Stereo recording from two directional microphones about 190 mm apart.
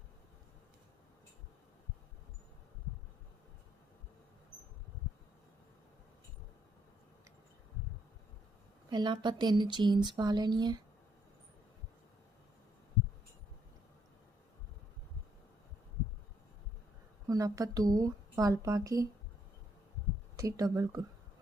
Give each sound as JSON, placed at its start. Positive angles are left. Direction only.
{"t": 8.9, "sound": "speech", "side_deg": -25}
{"t": 17.2, "sound": "a woman's voice", "side_deg": -20}
{"t": 20.3, "sound": "speech", "side_deg": -20}